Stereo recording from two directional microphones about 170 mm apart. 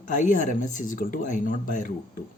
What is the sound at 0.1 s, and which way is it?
A woman's voice, 50° left (ahead or behind).